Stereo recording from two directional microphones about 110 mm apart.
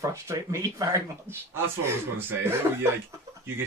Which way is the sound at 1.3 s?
20° right (ahead or behind).